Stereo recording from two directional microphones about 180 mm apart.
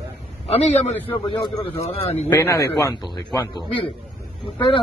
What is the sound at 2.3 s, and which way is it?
A man's voice, 15° left (ahead or behind).